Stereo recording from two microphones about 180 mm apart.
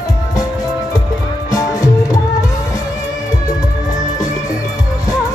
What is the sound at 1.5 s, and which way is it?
Music, 20° left (ahead or behind).